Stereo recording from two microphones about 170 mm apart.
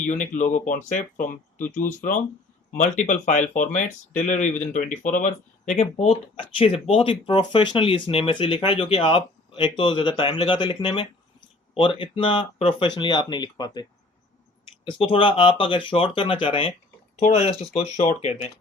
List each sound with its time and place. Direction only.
0.1 s speech: 45° left (ahead or behind); by 13.8 s 25° left (ahead or behind)
14.8 s speech: 30° left (ahead or behind)
17.2 s speech: 40° left (ahead or behind)